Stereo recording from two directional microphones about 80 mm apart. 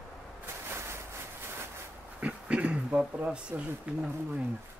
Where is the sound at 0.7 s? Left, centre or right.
Right.